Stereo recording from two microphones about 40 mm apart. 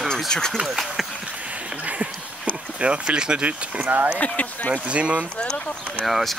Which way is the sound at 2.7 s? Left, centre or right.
Right.